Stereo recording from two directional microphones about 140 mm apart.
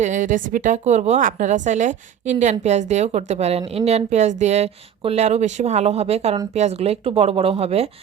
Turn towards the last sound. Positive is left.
turn(degrees=-45)  # may be behind; listen again after turning